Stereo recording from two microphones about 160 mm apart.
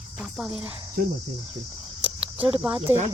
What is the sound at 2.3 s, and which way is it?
Speech, 30° right (ahead or behind).